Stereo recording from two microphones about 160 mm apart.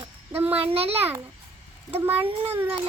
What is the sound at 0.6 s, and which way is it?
Speech, 40° right (ahead or behind).